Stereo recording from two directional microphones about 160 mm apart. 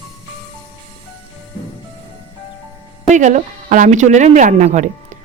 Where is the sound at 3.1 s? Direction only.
50° right (ahead or behind).